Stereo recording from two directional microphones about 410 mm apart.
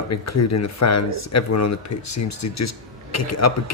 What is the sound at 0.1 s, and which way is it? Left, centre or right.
Speech, left.